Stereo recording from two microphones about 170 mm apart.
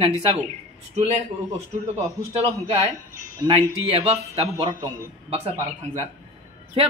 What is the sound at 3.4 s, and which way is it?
Speech, 35° right (ahead or behind).